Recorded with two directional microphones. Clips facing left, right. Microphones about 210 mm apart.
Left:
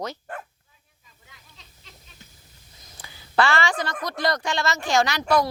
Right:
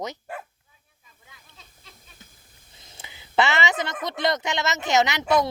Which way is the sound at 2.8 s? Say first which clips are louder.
Even; 25° right (ahead or behind).